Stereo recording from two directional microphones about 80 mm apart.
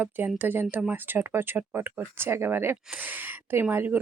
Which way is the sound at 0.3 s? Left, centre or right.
Right.